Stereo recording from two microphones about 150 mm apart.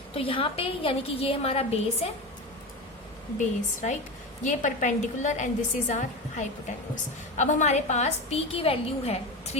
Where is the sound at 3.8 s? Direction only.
50° left (ahead or behind).